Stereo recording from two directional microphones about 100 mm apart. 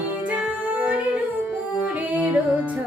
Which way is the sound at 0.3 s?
10° right (ahead or behind).